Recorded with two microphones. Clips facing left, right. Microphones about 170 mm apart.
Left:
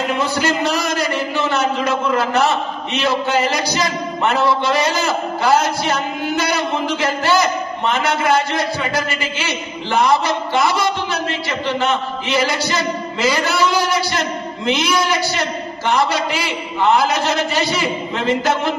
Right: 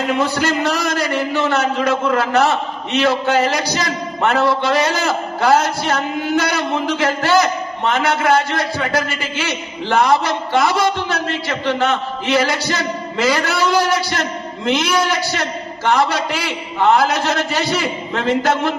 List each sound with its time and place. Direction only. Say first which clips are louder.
0.4 s a man's voice: even; 60° right (ahead or behind)